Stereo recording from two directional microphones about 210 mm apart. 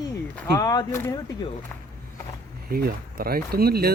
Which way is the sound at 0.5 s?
20° left (ahead or behind).